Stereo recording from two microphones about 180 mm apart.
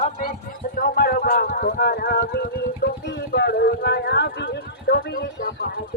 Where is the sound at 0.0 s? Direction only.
55° left (ahead or behind).